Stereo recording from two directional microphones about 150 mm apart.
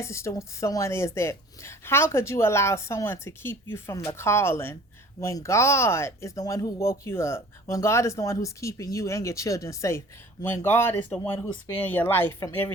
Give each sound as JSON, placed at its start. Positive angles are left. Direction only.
{"t": 0.0, "sound": "a woman's voice", "side_deg": 20}